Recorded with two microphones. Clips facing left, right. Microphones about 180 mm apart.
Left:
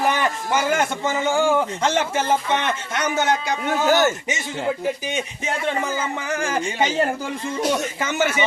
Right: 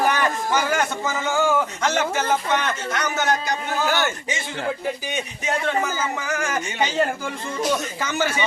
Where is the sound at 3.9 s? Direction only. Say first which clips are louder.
Left 7 dB; 40° left (ahead or behind).